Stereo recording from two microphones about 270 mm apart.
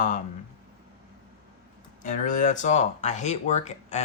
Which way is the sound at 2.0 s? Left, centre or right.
Left.